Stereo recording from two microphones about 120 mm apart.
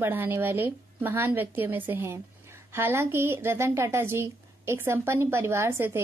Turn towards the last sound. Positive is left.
turn(degrees=-20)  # may be behind; listen again after turning